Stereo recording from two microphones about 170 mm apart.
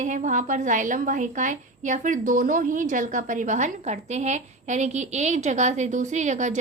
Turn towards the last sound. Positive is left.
turn(degrees=-45)  # may be behind; listen again after turning